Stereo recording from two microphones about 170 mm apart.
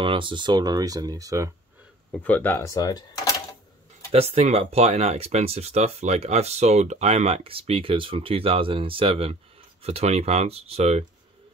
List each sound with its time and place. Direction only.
0.0 s speech: 30° right (ahead or behind)
2.2 s speech: 10° left (ahead or behind)
4.1 s speech: 35° right (ahead or behind)